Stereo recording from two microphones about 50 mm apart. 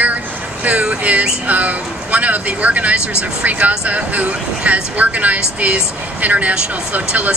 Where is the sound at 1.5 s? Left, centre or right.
Right.